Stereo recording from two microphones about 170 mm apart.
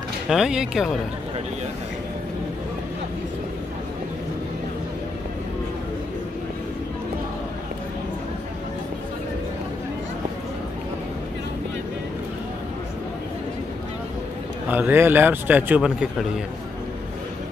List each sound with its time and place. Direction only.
0.3 s speech: 5° right (ahead or behind)
14.7 s a man's voice: 10° right (ahead or behind)